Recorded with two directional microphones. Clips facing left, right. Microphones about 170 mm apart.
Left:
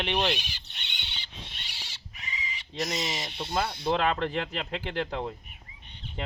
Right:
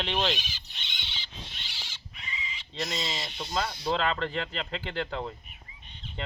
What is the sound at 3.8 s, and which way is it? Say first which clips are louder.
Speech: left 3 dB; 15° left (ahead or behind).